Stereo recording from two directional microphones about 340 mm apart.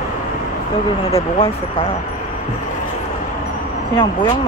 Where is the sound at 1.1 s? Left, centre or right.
Centre.